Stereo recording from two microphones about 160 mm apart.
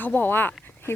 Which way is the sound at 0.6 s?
15° left (ahead or behind).